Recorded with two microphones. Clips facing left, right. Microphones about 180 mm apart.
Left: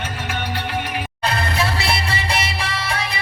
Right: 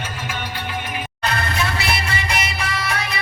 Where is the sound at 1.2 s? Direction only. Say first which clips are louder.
Left 1 dB; 30° left (ahead or behind).